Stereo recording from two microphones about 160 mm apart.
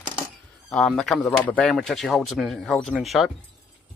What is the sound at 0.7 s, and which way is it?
Speech, centre (ahead or behind).